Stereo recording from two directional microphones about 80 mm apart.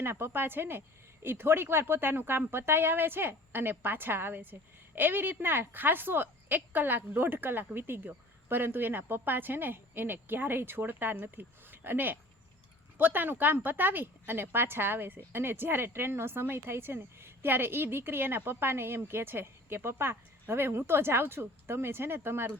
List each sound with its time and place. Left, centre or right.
0.0 s a woman's voice: right